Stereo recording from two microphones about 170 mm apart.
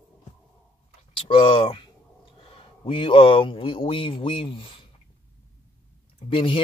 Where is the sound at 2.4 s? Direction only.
30° left (ahead or behind).